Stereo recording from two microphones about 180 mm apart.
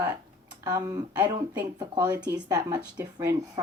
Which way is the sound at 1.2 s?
20° right (ahead or behind).